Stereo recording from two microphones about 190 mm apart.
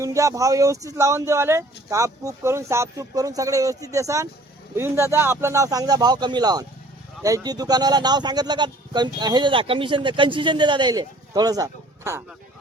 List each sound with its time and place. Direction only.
0.0 s speech: 15° right (ahead or behind)